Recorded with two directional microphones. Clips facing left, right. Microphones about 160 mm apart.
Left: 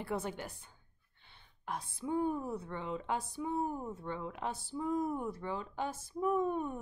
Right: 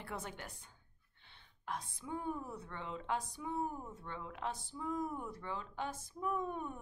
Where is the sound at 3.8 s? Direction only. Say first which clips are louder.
Left 7 dB; 20° left (ahead or behind).